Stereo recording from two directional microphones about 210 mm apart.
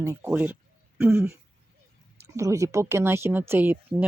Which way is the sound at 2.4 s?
15° right (ahead or behind).